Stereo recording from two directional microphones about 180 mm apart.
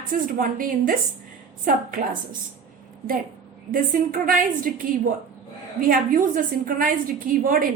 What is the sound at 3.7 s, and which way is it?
A woman's voice, 50° right (ahead or behind).